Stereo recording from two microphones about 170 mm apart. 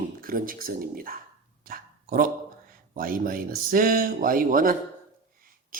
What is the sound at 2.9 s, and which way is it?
Speech, 55° right (ahead or behind).